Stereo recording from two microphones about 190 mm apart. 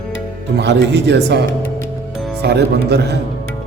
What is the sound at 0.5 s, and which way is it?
Speech, 65° right (ahead or behind).